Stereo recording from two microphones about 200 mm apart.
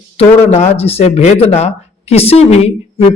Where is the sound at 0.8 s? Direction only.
30° left (ahead or behind).